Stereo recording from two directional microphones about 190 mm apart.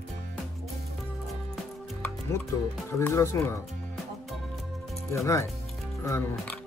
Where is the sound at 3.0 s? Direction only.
15° left (ahead or behind).